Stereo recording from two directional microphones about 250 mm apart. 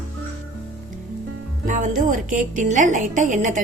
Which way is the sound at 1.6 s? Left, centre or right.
Right.